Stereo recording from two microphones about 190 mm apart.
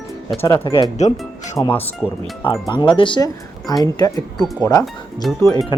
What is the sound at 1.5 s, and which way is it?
Speech, 15° left (ahead or behind).